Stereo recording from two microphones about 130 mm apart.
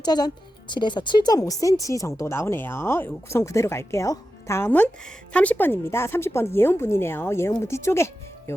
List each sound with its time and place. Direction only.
0.0 s speech: 30° left (ahead or behind)